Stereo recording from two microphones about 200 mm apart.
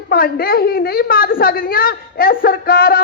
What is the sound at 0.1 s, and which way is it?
A woman's voice, 50° left (ahead or behind).